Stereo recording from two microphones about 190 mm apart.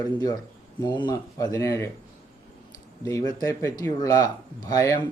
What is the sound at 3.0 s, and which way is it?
Speech, 15° left (ahead or behind).